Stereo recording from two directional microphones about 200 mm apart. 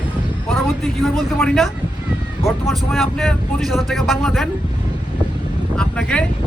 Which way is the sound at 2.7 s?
Centre (ahead or behind).